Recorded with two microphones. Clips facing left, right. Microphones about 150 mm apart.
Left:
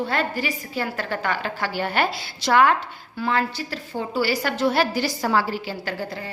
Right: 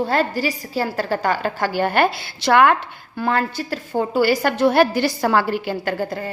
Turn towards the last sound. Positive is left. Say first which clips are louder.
# right 6 dB
turn(degrees=-50)  # may be behind; listen again after turning